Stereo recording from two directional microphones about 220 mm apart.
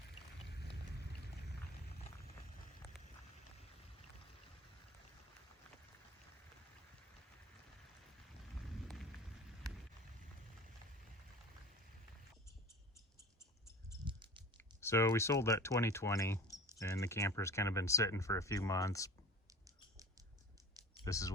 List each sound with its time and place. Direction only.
14.0 s a sound: 20° right (ahead or behind)
14.6 s speech: 10° left (ahead or behind)
19.5 s mouse: 15° right (ahead or behind)
21.0 s speech: 15° left (ahead or behind)